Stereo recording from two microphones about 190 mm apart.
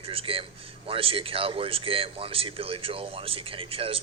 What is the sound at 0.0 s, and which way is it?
A man's voice, 30° right (ahead or behind).